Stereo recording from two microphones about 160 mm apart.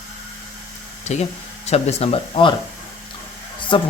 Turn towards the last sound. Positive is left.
turn(degrees=35)  # may be behind; listen again after turning